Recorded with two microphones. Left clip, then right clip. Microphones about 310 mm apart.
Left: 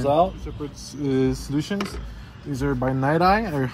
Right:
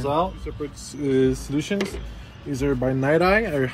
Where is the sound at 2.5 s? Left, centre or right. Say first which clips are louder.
Right 1 dB; centre.